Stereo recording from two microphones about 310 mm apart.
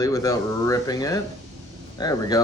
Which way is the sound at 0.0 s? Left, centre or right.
Centre.